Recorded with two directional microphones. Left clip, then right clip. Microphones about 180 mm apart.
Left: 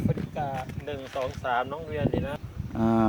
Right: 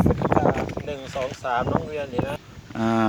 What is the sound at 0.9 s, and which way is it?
Speech, 30° right (ahead or behind).